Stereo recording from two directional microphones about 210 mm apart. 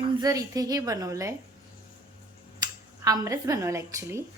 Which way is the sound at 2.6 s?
20° right (ahead or behind).